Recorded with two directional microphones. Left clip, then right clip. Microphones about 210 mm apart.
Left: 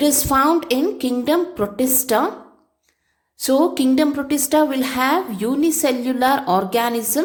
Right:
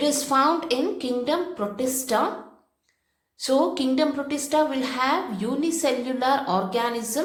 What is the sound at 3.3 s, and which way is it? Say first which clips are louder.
A woman's voice: left 5 dB; 35° left (ahead or behind).